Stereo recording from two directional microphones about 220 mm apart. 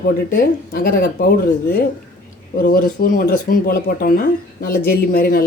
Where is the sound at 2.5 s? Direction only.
40° left (ahead or behind).